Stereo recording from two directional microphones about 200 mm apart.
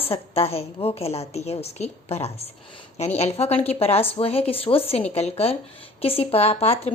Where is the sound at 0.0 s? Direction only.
30° left (ahead or behind).